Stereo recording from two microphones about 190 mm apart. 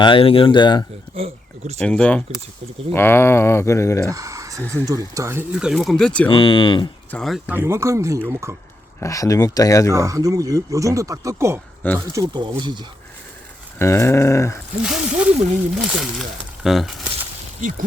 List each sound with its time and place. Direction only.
0.0 s speech: 25° left (ahead or behind)
1.1 s speech: 30° right (ahead or behind)
1.8 s speech: 5° left (ahead or behind)
4.0 s a sound: 15° right (ahead or behind)
4.7 s speech: 15° right (ahead or behind); by 6.2 s 5° left (ahead or behind)
6.2 s speech: 25° left (ahead or behind)
7.1 s speech: centre (ahead or behind); by 8.5 s 15° right (ahead or behind)
9.0 s speech: 15° left (ahead or behind)
9.9 s speech: 15° right (ahead or behind)
13.7 s speech: 15° left (ahead or behind)
14.8 s speech: 5° right (ahead or behind)
16.6 s speech: centre (ahead or behind)
17.6 s speech: 45° right (ahead or behind)